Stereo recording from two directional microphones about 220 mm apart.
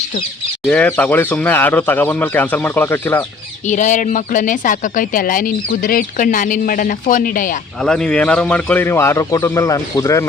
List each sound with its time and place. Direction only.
0.7 s speech: 5° left (ahead or behind)
3.7 s speech: 35° left (ahead or behind)
7.8 s speech: 5° left (ahead or behind)